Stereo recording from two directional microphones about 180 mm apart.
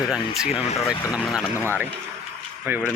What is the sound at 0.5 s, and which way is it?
Speech, 35° left (ahead or behind).